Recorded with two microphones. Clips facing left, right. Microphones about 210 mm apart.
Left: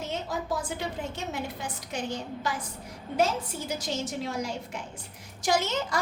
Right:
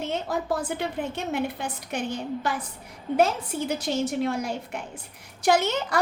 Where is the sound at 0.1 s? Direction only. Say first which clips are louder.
Right 3 dB; 60° right (ahead or behind).